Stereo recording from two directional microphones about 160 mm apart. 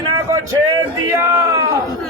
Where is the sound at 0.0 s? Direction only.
20° right (ahead or behind).